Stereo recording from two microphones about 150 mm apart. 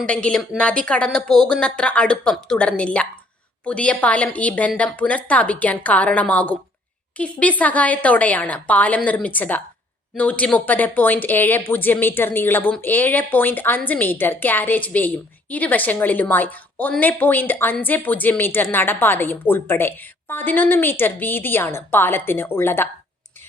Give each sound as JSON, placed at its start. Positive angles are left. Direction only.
{"t": 0.0, "sound": "a woman's voice", "side_deg": 5}